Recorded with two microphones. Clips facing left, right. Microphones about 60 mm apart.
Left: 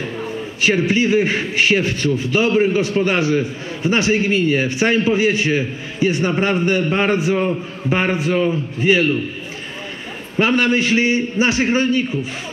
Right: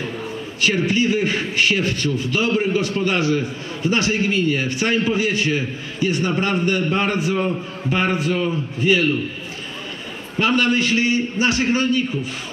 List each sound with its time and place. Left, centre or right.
0.6 s a man's voice: left
10.4 s a man's voice: left